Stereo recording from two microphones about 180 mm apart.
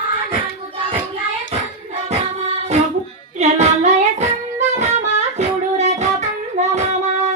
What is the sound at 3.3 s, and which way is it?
Child singing, 40° right (ahead or behind).